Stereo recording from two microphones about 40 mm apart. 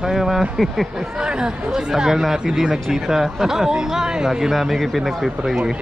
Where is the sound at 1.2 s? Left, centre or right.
Right.